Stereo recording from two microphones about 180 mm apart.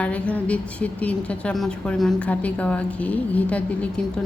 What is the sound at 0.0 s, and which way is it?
A woman's voice, 5° left (ahead or behind).